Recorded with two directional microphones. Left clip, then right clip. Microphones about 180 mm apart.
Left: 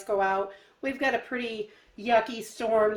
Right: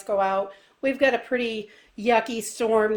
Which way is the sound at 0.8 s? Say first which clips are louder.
Right 6 dB; 45° right (ahead or behind).